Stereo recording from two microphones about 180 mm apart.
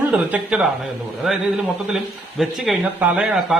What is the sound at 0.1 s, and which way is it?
Speech, 10° right (ahead or behind).